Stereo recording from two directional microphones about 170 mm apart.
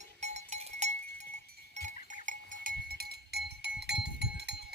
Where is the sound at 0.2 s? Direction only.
40° right (ahead or behind).